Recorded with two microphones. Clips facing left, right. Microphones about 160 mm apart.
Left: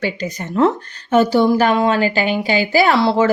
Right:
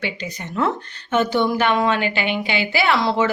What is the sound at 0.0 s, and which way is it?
Speech, 45° left (ahead or behind).